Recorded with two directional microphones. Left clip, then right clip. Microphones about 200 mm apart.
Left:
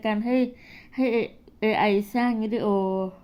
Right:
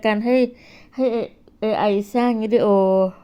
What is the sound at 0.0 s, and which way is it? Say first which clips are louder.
A woman's voice: right 7 dB; 30° right (ahead or behind).